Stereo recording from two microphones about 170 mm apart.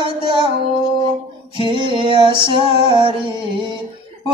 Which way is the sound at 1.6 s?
30° right (ahead or behind).